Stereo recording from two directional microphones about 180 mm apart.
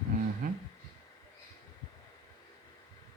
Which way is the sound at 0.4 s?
55° right (ahead or behind).